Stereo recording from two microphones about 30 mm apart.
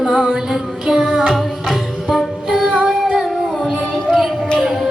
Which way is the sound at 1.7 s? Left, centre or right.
Centre.